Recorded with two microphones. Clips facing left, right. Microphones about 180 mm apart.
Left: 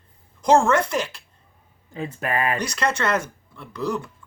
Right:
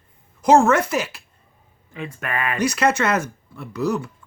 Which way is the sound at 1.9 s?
35° left (ahead or behind).